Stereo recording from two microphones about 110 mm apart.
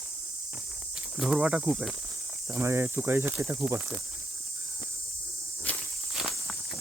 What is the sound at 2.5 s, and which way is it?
Speech, 20° right (ahead or behind).